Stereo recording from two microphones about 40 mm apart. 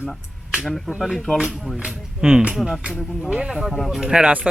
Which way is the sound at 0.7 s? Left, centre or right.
Centre.